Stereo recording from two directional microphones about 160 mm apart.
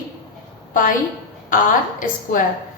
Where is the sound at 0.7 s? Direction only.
55° left (ahead or behind).